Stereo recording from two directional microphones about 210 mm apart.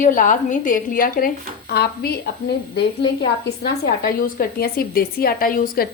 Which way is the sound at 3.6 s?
45° left (ahead or behind).